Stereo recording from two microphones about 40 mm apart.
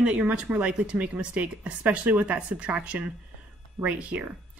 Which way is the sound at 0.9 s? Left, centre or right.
Right.